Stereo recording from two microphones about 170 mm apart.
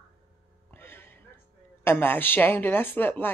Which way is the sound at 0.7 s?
15° left (ahead or behind).